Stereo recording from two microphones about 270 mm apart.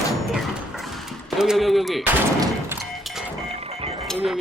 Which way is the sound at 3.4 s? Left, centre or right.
Right.